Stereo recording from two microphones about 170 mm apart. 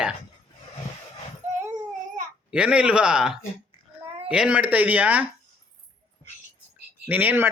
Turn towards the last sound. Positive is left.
turn(degrees=-10)  # may be behind; listen again after turning